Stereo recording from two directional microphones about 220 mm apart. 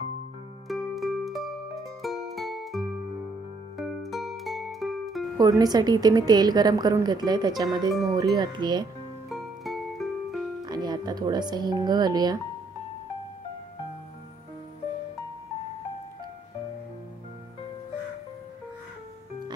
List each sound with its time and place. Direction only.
0.7 s music: centre (ahead or behind)
5.4 s a woman's voice: 15° right (ahead or behind)
9.3 s music: centre (ahead or behind)
10.6 s speech: 20° right (ahead or behind)